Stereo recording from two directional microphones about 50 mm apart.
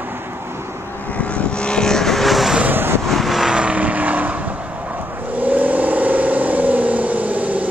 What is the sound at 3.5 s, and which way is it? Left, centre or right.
Vehicle, right.